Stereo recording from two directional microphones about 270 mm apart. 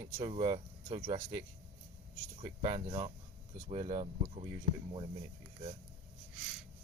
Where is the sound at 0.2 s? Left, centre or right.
Centre.